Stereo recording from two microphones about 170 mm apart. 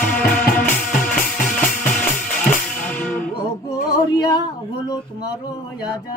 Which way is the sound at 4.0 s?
25° left (ahead or behind).